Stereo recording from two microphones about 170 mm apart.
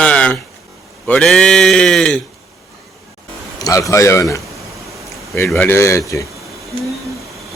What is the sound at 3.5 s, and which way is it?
Speech, 20° left (ahead or behind).